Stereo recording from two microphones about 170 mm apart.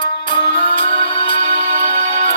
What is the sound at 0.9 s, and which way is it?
Music, 30° left (ahead or behind).